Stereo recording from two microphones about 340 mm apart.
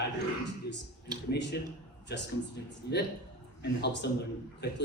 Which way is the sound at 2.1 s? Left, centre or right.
Left.